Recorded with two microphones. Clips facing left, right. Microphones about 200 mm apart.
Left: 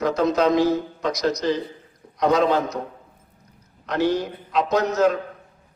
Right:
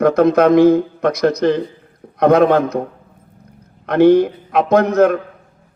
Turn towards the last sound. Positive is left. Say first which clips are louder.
# right 7 dB
turn(degrees=-55)  # may be behind; listen again after turning